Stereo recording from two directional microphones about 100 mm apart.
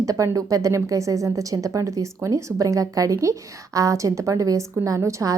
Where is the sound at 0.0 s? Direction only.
35° right (ahead or behind).